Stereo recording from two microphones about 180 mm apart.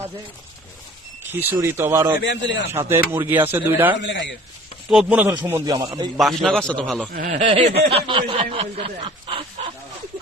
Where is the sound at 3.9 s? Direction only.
85° left.